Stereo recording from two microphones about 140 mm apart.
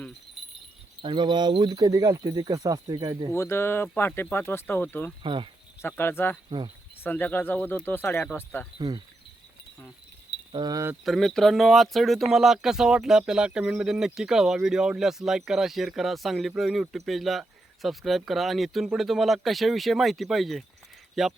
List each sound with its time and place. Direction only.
0.4 s a sound: centre (ahead or behind)
1.0 s speech: 35° right (ahead or behind)
3.3 s speech: 20° left (ahead or behind)
5.2 s speech: 40° right (ahead or behind)
5.8 s speech: 15° left (ahead or behind)
10.5 s speech: 30° right (ahead or behind)
11.0 s speech: centre (ahead or behind)